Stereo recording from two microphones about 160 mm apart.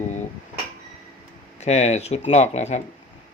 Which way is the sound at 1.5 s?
45° left (ahead or behind).